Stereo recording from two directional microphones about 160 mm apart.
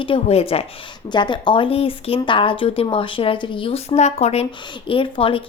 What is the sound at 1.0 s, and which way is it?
A woman's voice, 30° left (ahead or behind).